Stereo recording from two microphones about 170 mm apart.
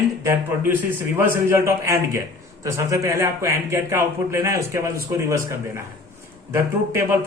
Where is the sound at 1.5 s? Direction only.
15° right (ahead or behind).